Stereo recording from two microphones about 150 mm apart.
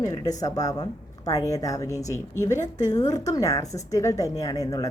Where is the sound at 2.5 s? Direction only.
50° left (ahead or behind).